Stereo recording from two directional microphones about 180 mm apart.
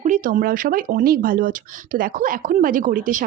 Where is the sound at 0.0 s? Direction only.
45° right (ahead or behind).